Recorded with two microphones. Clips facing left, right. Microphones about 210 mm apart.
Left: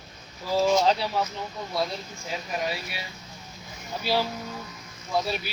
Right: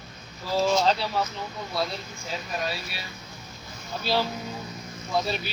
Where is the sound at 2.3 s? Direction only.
15° left (ahead or behind).